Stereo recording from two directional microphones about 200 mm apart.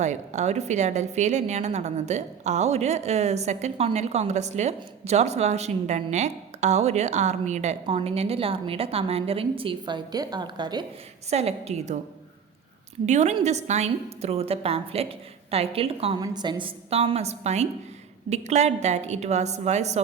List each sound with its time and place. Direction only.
0.0 s a woman's voice: 35° right (ahead or behind)
13.1 s a woman's voice: 35° right (ahead or behind)